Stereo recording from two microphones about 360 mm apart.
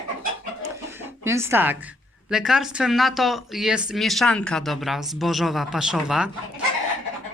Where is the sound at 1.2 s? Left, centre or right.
Centre.